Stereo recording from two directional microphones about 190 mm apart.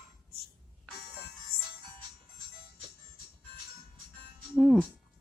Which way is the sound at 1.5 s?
55° left (ahead or behind).